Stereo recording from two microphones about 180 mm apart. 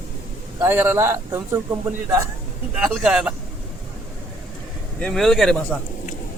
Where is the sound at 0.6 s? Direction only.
10° right (ahead or behind).